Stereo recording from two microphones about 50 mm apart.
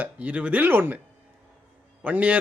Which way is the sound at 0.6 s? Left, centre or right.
Right.